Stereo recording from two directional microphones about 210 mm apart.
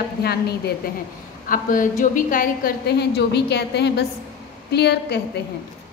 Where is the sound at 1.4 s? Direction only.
40° left (ahead or behind).